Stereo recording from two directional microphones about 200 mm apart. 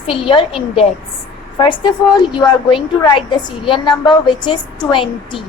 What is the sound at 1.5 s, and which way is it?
A woman's voice, 25° left (ahead or behind).